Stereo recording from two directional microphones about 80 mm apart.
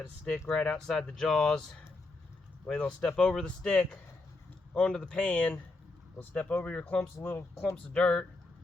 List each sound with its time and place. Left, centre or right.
0.4 s speech: centre
2.6 s speech: centre
7.2 s speech: left
7.6 s speech: centre